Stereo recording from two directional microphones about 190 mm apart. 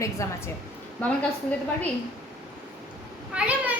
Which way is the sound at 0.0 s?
15° left (ahead or behind).